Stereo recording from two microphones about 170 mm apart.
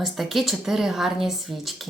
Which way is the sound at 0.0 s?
Centre (ahead or behind).